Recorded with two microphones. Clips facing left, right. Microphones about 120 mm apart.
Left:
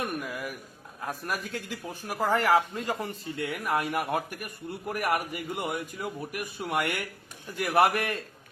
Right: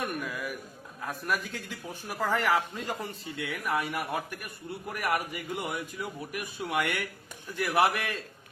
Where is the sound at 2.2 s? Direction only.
40° left (ahead or behind).